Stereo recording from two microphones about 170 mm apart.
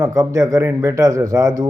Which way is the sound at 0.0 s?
20° right (ahead or behind).